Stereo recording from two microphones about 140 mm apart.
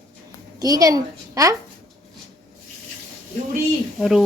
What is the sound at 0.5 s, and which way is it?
A child's voice, 25° right (ahead or behind).